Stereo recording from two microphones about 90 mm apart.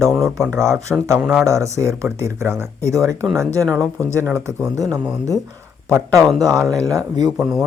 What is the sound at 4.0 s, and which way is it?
Speech, 30° right (ahead or behind).